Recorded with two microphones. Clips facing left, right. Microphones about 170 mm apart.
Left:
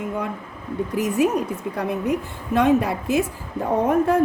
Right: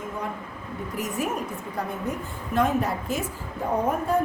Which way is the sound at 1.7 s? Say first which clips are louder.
Left 6 dB; 75° left (ahead or behind).